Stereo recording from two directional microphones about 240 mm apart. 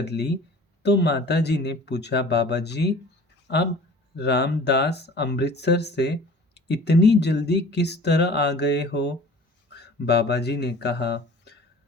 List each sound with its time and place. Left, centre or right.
0.0 s speech: left